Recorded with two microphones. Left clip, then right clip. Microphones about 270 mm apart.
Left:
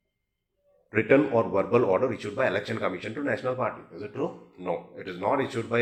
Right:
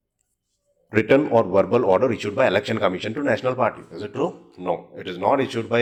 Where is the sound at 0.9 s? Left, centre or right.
Right.